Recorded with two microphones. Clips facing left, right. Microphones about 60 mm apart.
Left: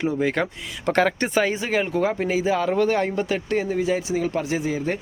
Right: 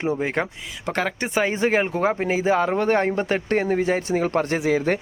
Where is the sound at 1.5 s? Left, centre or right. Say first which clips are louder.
Right 2 dB; right.